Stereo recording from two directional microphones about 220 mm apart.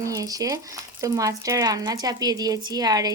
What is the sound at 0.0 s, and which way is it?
Speech, 15° right (ahead or behind).